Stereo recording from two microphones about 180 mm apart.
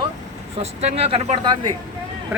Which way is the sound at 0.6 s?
35° right (ahead or behind).